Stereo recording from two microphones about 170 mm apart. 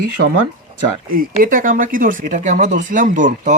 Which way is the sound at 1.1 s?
55° right (ahead or behind).